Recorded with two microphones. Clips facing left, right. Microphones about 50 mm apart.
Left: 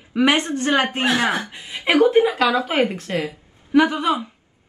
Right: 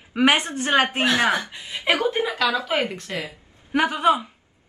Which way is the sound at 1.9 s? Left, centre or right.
Left.